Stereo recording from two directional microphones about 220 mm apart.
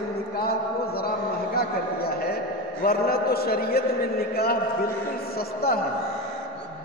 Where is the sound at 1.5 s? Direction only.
45° left (ahead or behind).